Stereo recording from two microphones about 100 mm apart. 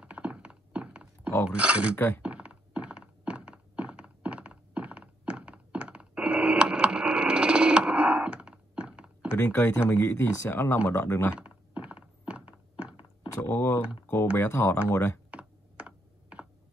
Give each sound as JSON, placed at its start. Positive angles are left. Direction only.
{"t": 0.0, "sound": "thunk", "side_deg": -10}
{"t": 1.5, "sound": "speech", "side_deg": -15}
{"t": 2.0, "sound": "speech", "side_deg": 20}
{"t": 2.2, "sound": "thunk", "side_deg": -10}
{"t": 9.4, "sound": "speech", "side_deg": 25}
{"t": 11.3, "sound": "thunk", "side_deg": -10}
{"t": 13.4, "sound": "speech", "side_deg": 25}
{"t": 15.3, "sound": "computer keyboard", "side_deg": -15}